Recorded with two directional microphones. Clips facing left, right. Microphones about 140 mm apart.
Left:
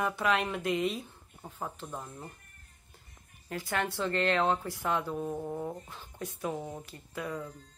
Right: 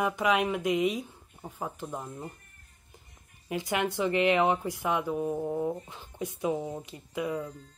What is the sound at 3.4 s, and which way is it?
Speech, 15° right (ahead or behind).